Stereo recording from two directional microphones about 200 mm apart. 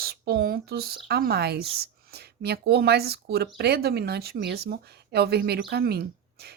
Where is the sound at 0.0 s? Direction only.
50° right (ahead or behind).